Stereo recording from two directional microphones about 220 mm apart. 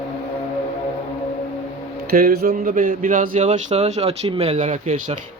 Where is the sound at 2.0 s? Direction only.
45° right (ahead or behind).